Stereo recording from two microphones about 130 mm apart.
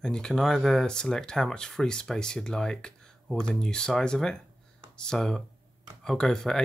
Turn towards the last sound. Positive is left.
turn(degrees=5)  # may be behind; listen again after turning